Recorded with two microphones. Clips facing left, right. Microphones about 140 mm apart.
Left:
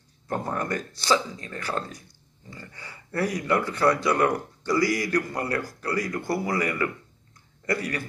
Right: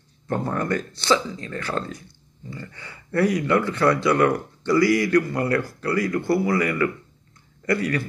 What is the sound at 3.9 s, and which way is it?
Speech, 15° left (ahead or behind).